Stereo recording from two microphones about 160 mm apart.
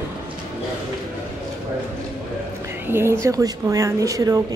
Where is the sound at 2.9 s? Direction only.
15° right (ahead or behind).